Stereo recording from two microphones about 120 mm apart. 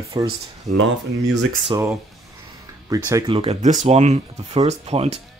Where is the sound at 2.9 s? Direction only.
30° right (ahead or behind).